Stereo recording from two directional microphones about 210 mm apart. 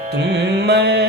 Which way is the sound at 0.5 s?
50° right (ahead or behind).